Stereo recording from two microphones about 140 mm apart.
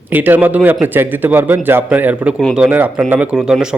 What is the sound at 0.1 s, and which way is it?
Speech, 10° right (ahead or behind).